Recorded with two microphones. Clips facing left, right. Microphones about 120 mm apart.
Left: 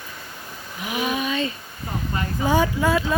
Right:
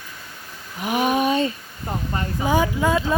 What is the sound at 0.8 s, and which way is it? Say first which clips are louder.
Speech: right 5 dB; 50° right (ahead or behind).